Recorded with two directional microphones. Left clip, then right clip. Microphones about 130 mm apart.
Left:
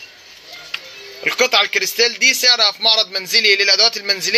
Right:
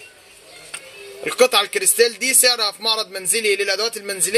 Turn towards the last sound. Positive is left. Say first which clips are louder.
# left 8 dB
turn(degrees=-40)  # may be behind; listen again after turning